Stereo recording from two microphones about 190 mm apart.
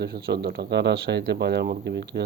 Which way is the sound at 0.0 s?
55° right (ahead or behind).